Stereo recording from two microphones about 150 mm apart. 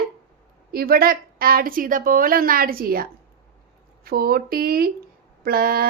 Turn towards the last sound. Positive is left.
turn(degrees=-80)